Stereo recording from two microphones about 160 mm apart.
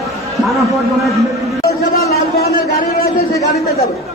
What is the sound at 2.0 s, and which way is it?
Speech, 75° left (ahead or behind).